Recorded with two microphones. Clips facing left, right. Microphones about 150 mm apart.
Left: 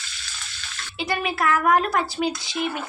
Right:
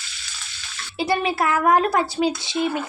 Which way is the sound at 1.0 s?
30° right (ahead or behind).